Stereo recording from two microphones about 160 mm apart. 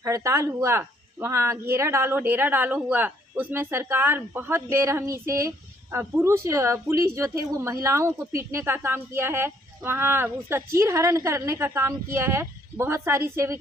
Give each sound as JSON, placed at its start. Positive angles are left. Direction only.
{"t": 0.0, "sound": "a woman's voice", "side_deg": -20}